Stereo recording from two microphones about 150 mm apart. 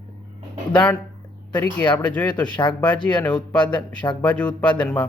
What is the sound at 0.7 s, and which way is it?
Speech, 10° left (ahead or behind).